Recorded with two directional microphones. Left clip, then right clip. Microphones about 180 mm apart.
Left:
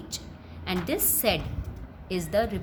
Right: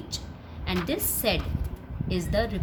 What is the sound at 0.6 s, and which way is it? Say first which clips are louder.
A woman's voice: even; 25° left (ahead or behind).